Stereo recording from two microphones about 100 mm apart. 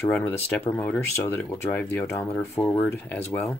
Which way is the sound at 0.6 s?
20° left (ahead or behind).